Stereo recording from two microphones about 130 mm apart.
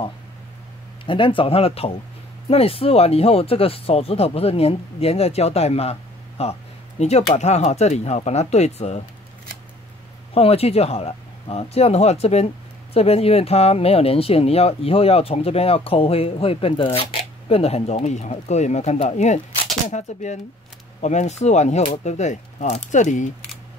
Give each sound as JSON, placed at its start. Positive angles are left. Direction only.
{"t": 1.0, "sound": "speech", "side_deg": 40}
{"t": 10.3, "sound": "speech", "side_deg": 50}